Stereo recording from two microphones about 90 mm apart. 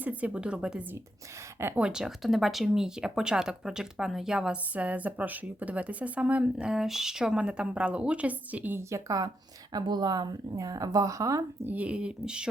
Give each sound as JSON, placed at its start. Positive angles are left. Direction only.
{"t": 0.0, "sound": "speech", "side_deg": -15}
{"t": 8.9, "sound": "speech", "side_deg": -40}
{"t": 9.7, "sound": "speech", "side_deg": -50}
{"t": 11.6, "sound": "speech", "side_deg": -15}